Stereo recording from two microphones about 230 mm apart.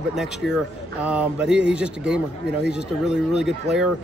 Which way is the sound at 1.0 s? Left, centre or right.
Centre.